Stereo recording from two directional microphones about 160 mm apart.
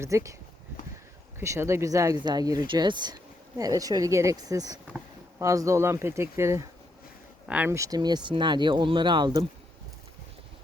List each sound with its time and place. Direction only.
0.0 s speech: 20° right (ahead or behind)
1.4 s speech: 15° right (ahead or behind)